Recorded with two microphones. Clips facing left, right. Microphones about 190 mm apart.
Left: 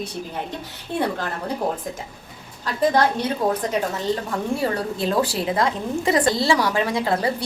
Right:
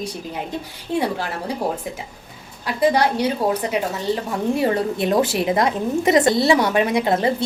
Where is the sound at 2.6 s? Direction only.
10° right (ahead or behind).